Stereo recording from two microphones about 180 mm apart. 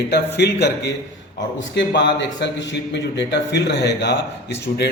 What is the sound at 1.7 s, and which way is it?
A man's voice, 85° left.